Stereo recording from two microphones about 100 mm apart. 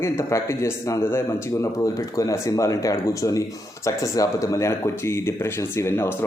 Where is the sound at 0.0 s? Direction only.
30° left (ahead or behind).